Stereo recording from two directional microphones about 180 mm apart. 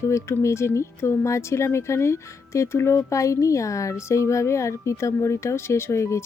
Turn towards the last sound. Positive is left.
turn(degrees=15)  # may be behind; listen again after turning